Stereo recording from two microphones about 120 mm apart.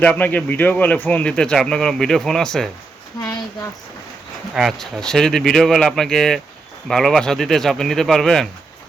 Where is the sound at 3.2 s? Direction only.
25° left (ahead or behind).